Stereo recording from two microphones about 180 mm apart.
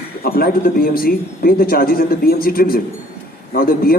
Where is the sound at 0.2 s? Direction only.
55° left (ahead or behind).